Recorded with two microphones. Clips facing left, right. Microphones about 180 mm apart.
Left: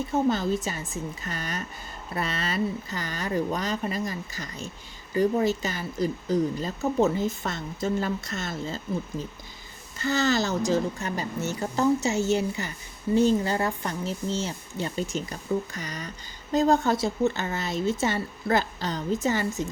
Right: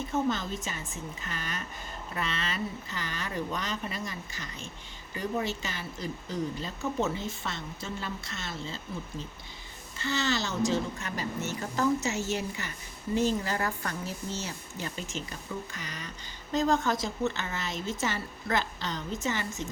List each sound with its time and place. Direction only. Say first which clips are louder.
0.1 s speech: left 6 dB; 35° left (ahead or behind)